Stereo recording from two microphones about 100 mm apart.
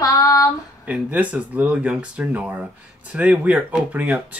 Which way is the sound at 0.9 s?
15° right (ahead or behind).